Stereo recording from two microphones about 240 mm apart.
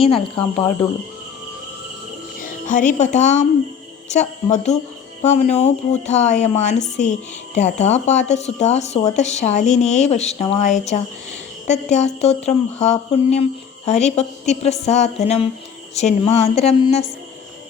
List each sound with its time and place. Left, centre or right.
2.4 s speech: left